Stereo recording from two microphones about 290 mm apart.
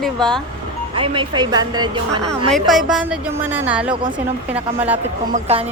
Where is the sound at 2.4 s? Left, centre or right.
Centre.